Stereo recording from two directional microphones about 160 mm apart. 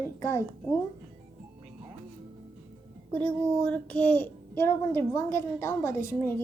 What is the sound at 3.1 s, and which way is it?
A child's voice, 10° left (ahead or behind).